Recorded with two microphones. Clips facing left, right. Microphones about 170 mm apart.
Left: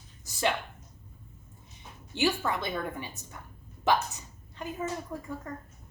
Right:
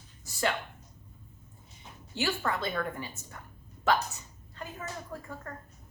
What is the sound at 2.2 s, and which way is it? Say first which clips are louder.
Speech: left 3 dB; 15° left (ahead or behind).